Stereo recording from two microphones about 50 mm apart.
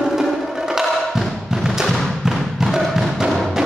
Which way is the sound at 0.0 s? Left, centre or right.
Centre.